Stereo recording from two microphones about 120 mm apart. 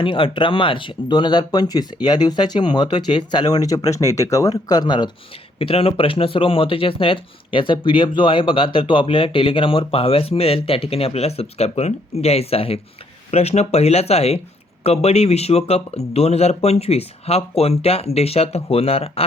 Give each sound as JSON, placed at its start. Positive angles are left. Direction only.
{"t": 0.0, "sound": "speech", "side_deg": 45}
{"t": 5.5, "sound": "speech", "side_deg": 50}